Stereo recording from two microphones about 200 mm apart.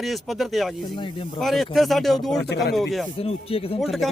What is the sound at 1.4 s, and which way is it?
Speech, centre (ahead or behind).